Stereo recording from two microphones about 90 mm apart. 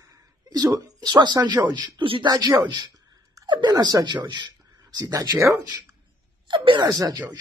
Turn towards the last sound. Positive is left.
turn(degrees=-45)  # may be behind; listen again after turning